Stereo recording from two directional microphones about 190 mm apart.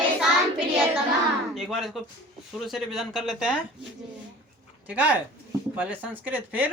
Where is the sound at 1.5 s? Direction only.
Centre (ahead or behind).